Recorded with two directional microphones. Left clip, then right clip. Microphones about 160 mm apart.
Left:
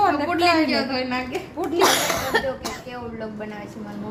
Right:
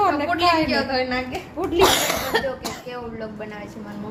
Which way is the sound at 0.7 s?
20° left (ahead or behind).